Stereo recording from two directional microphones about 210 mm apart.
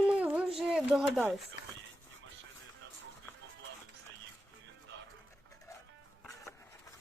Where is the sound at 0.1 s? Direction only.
5° right (ahead or behind).